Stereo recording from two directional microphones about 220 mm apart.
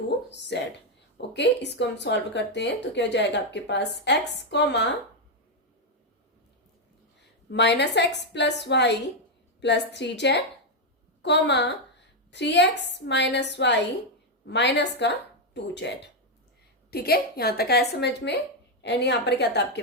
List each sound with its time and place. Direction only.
0.3 s speech: 50° left (ahead or behind)
7.5 s speech: 50° left (ahead or behind)